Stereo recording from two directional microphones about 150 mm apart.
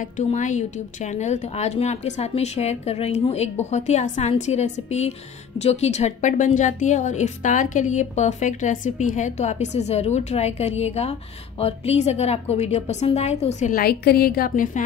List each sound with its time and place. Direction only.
0.0 s a woman's voice: 50° left (ahead or behind)
13.7 s a woman's voice: 90° left; by 14.8 s 60° left (ahead or behind)